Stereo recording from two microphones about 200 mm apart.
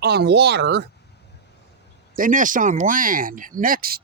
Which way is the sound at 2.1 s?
40° right (ahead or behind).